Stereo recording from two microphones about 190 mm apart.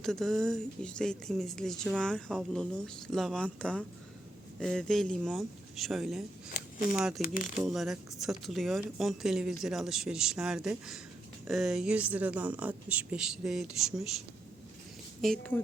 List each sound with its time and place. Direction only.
0.0 s speech: centre (ahead or behind)
6.5 s a sound: 50° left (ahead or behind)
6.9 s speech: centre (ahead or behind)
7.2 s speech: 45° left (ahead or behind)
7.7 s speech: centre (ahead or behind)
15.2 s speech: 5° left (ahead or behind)